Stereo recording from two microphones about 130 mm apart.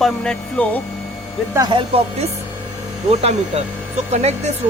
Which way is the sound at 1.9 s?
45° right (ahead or behind).